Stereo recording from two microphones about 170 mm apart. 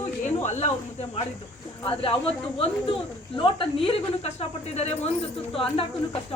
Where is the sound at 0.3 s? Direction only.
45° left (ahead or behind).